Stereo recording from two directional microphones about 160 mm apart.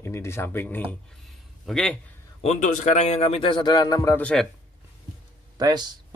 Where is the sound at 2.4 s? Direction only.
50° left (ahead or behind); by 4.2 s 20° left (ahead or behind).